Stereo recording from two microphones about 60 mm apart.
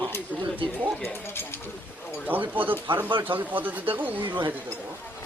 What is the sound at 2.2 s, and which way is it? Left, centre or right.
Speech, right.